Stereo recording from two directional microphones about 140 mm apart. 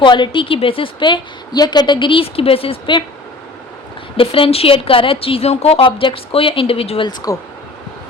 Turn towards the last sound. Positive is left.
turn(degrees=25)  # may be behind; listen again after turning